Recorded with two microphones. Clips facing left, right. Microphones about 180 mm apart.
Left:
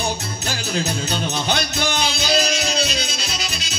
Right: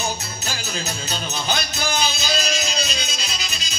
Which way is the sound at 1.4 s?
70° left (ahead or behind).